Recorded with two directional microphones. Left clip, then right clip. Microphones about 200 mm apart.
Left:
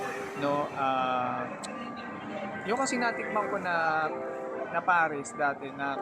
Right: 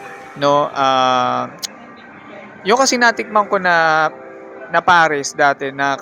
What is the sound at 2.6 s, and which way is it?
Speech, 50° right (ahead or behind).